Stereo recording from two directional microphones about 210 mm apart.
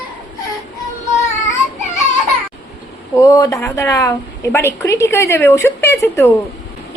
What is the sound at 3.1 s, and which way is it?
A woman's voice, 15° left (ahead or behind).